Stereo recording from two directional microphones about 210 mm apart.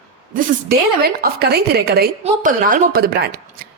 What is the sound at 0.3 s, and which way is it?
A woman's voice, 45° right (ahead or behind).